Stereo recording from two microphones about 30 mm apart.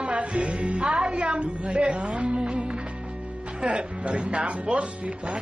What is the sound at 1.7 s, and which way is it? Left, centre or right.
Speech, right.